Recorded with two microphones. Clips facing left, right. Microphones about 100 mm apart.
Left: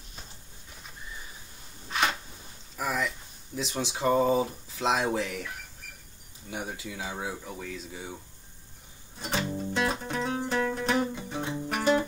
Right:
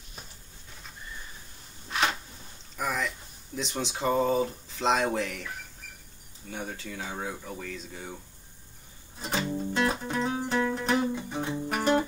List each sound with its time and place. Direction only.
1.9 s a sound: centre (ahead or behind)
3.5 s speech: centre (ahead or behind)
6.5 s speech: 15° left (ahead or behind)
9.2 s music: centre (ahead or behind)